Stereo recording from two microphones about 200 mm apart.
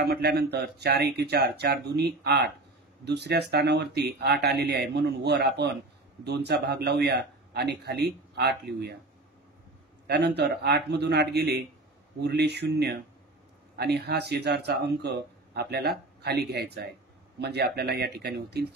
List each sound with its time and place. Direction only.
0.0 s speech: 50° right (ahead or behind)
10.0 s speech: 55° right (ahead or behind)